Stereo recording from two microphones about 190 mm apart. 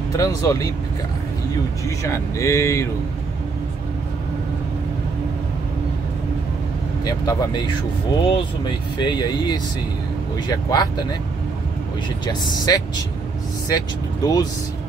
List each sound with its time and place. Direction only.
0.2 s speech: 20° left (ahead or behind)
1.9 s speech: 15° left (ahead or behind)
7.1 s speech: 20° left (ahead or behind)
12.3 s speech: 20° left (ahead or behind)